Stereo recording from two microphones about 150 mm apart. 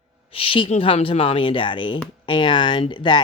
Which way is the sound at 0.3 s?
35° left (ahead or behind).